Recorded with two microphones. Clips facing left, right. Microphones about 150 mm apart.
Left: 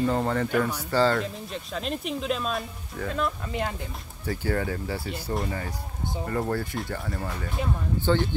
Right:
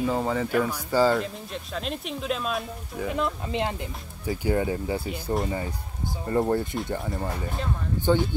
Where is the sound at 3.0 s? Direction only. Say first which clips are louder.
Right 1 dB; 20° right (ahead or behind).